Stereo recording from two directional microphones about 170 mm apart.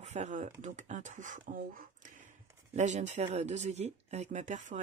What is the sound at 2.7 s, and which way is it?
Speech, 45° right (ahead or behind).